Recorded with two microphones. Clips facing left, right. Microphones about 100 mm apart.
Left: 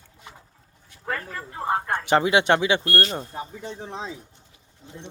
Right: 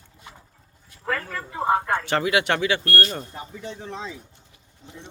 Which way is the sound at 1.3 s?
90° right.